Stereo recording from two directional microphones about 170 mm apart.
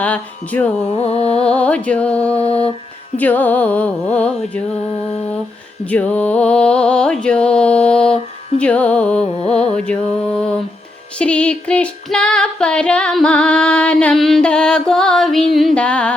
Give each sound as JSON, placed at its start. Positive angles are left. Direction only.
{"t": 0.0, "sound": "music", "side_deg": 10}
{"t": 0.9, "sound": "carnatic music", "side_deg": 35}
{"t": 1.5, "sound": "music", "side_deg": 5}
{"t": 5.8, "sound": "music", "side_deg": 10}
{"t": 8.0, "sound": "mantra", "side_deg": 35}
{"t": 8.5, "sound": "carnatic music", "side_deg": 5}
{"t": 9.2, "sound": "music", "side_deg": 40}
{"t": 9.9, "sound": "music", "side_deg": 5}
{"t": 11.2, "sound": "female singing", "side_deg": 5}
{"t": 15.5, "sound": "music", "side_deg": 5}